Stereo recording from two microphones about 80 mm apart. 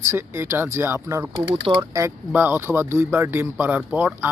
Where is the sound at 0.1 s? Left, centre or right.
Right.